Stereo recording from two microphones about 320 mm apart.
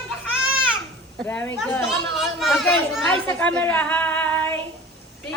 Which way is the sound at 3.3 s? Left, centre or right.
Centre.